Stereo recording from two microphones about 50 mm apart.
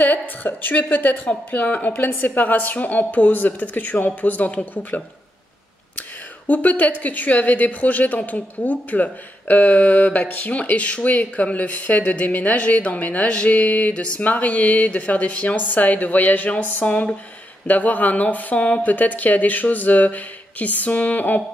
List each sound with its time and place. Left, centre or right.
0.0 s a woman's voice: left